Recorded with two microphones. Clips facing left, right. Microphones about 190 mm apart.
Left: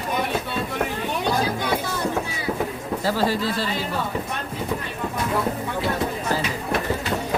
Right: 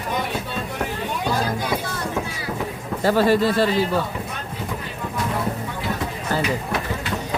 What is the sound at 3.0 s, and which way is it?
Speech, 60° right (ahead or behind).